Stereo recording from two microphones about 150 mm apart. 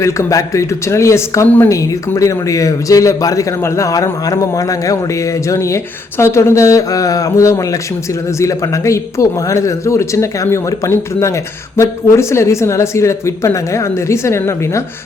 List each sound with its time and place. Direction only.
0.0 s speech: 20° left (ahead or behind)